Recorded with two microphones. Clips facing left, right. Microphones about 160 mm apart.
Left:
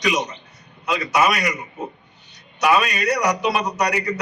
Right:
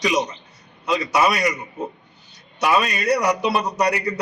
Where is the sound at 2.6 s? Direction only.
30° right (ahead or behind).